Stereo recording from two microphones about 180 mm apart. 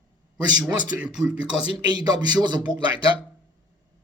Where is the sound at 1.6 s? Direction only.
25° right (ahead or behind).